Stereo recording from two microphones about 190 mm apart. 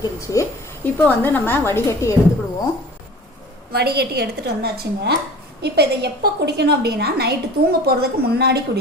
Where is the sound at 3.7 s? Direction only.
55° right (ahead or behind).